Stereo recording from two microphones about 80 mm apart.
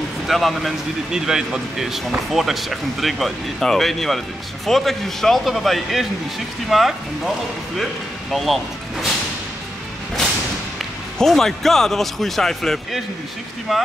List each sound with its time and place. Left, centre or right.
0.3 s speech: centre
10.8 s speech: centre